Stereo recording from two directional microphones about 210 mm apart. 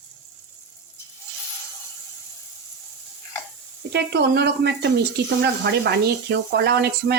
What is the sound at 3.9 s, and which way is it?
Speech, 50° right (ahead or behind).